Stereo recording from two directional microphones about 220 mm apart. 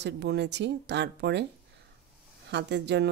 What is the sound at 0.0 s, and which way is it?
A woman's voice, 50° right (ahead or behind).